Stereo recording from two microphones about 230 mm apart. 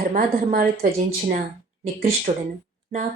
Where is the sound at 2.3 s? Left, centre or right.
Right.